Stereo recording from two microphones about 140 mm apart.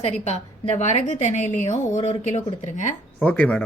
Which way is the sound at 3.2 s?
10° left (ahead or behind).